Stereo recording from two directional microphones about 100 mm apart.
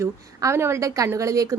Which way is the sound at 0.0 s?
25° right (ahead or behind).